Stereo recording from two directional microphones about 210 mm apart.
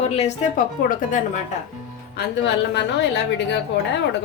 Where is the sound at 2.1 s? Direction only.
55° left (ahead or behind).